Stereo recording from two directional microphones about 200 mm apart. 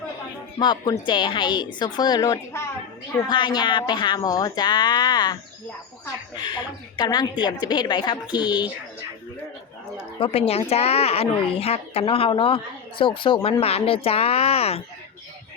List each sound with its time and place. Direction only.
0.6 s a woman's voice: 20° left (ahead or behind)
10.2 s a woman's voice: 30° left (ahead or behind)